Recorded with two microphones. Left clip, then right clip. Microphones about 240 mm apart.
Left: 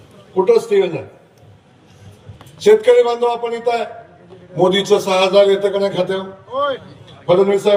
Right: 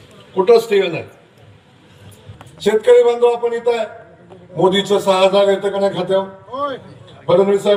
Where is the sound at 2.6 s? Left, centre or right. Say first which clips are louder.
Left 2 dB; left.